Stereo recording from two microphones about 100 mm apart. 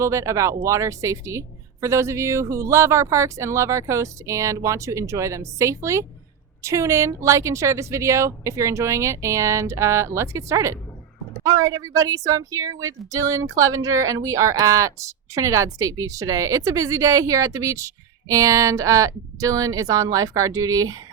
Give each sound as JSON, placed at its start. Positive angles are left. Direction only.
{"t": 0.0, "sound": "a woman's voice", "side_deg": -30}